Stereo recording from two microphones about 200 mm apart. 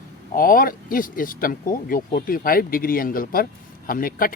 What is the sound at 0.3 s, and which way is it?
Speech, 45° left (ahead or behind).